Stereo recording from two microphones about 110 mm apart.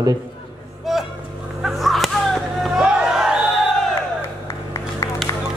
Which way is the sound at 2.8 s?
10° right (ahead or behind).